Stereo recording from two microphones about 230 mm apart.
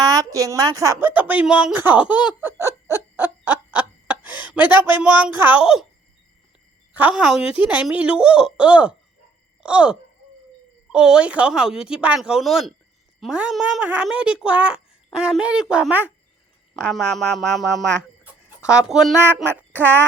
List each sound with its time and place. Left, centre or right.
0.0 s a sound: centre
4.6 s speech: centre
5.0 s speech: centre
6.9 s speech: centre